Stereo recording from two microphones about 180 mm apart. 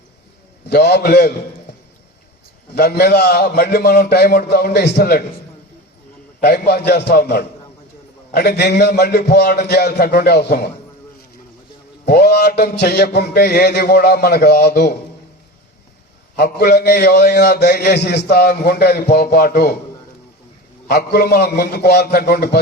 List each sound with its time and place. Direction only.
0.7 s a man's voice: 65° left (ahead or behind)
2.7 s a man's voice: 65° left (ahead or behind)
6.4 s a man's voice: 65° left (ahead or behind)
12.0 s a man's voice: 65° left (ahead or behind)
16.4 s a man's voice: 60° left (ahead or behind)
20.8 s a man's voice: 65° left (ahead or behind)